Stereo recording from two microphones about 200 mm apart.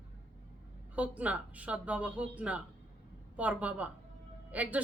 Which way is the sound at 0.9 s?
5° right (ahead or behind).